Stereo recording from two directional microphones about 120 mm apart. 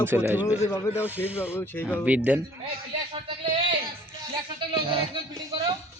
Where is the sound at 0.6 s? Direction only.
25° left (ahead or behind).